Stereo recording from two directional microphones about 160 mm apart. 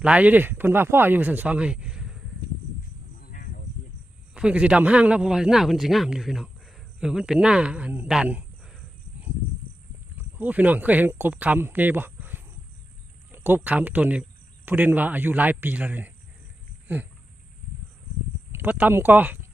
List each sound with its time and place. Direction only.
0.0 s speech: 10° right (ahead or behind)
3.2 s insect: 65° left (ahead or behind)
4.4 s speech: 5° right (ahead or behind)
10.2 s speech: 10° right (ahead or behind)
18.5 s speech: 10° right (ahead or behind)